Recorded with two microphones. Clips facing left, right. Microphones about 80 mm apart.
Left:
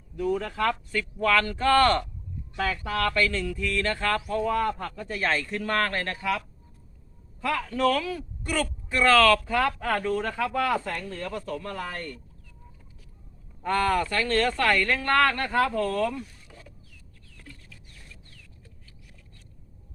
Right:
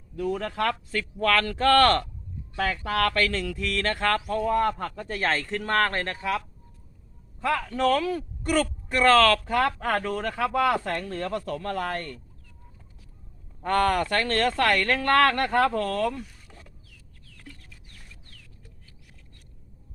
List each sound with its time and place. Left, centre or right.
0.3 s speech: right
2.6 s music: right
7.4 s music: right
10.2 s speech: right
13.7 s speech: right